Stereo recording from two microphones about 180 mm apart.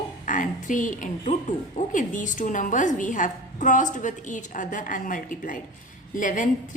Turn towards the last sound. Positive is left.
turn(degrees=45)  # may be behind; listen again after turning